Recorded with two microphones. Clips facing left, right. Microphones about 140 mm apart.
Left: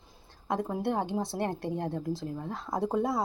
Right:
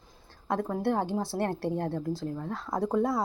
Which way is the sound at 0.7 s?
15° left (ahead or behind).